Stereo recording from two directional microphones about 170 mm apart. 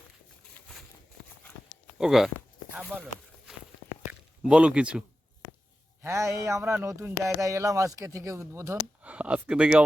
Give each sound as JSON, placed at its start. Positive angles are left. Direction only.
{"t": 2.0, "sound": "speech", "side_deg": 0}
{"t": 2.9, "sound": "speech", "side_deg": -15}
{"t": 4.4, "sound": "speech", "side_deg": -5}